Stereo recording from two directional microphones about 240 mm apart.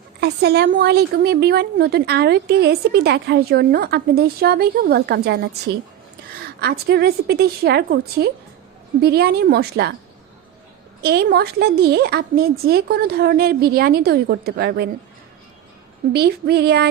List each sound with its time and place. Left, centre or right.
0.2 s a woman's voice: right
11.0 s speech: right
16.1 s a woman's voice: right